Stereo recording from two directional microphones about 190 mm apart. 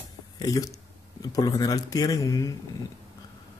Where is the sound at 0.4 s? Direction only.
20° left (ahead or behind).